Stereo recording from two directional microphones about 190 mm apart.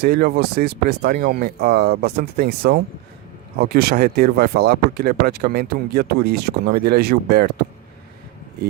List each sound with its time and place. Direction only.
0.0 s speech: 55° right (ahead or behind)